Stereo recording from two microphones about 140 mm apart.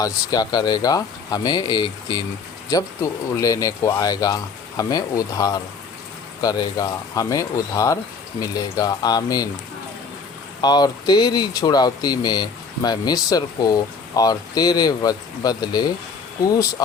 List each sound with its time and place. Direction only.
0.0 s speech: 30° left (ahead or behind)
10.6 s speech: 30° left (ahead or behind)